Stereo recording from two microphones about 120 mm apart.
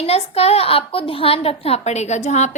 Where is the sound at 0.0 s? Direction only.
60° left (ahead or behind).